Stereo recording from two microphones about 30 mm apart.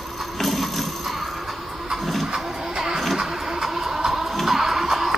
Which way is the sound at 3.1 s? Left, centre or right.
Centre.